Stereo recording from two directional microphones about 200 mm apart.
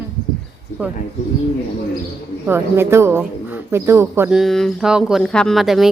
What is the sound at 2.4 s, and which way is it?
Speech, 10° right (ahead or behind).